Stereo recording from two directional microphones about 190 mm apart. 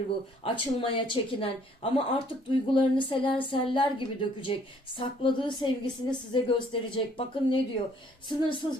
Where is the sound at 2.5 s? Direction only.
25° left (ahead or behind).